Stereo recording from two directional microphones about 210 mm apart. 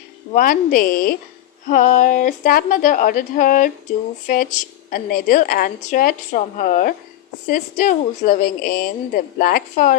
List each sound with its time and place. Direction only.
0.3 s a woman's voice: 40° left (ahead or behind)